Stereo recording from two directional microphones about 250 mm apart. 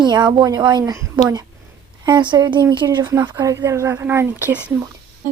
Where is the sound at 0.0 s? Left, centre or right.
Centre.